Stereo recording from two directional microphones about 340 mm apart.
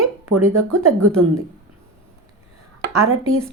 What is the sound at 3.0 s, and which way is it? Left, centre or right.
Speech, right.